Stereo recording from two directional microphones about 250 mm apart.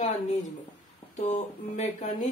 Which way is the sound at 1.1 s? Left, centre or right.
Left.